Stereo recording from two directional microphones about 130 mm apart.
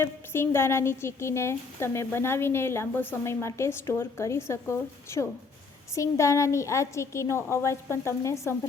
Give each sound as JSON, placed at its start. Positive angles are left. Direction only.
{"t": 0.0, "sound": "a woman's voice", "side_deg": 20}